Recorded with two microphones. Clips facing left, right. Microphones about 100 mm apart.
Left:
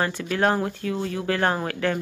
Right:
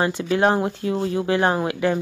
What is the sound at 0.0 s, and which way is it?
Speech, 20° right (ahead or behind).